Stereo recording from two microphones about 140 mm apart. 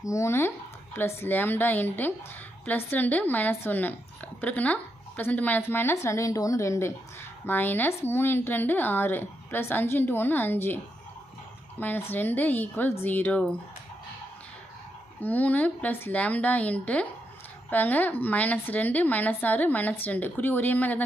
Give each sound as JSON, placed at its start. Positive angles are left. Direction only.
{"t": 0.0, "sound": "a woman's voice", "side_deg": 20}
{"t": 11.8, "sound": "a woman's voice", "side_deg": 15}
{"t": 15.2, "sound": "a woman's voice", "side_deg": 10}